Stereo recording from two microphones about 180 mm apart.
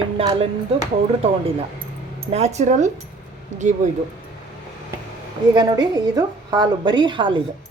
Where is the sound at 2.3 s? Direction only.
40° right (ahead or behind).